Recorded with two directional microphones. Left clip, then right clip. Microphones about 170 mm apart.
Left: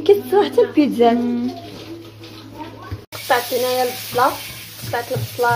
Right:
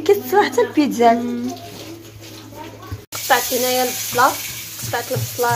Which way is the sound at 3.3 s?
Centre (ahead or behind).